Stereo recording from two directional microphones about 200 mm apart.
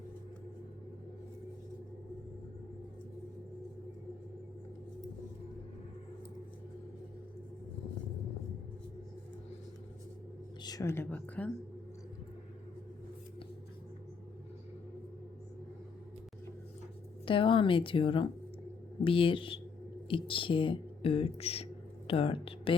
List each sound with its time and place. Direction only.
10.6 s a woman's voice: 20° left (ahead or behind)
17.2 s speech: 25° left (ahead or behind)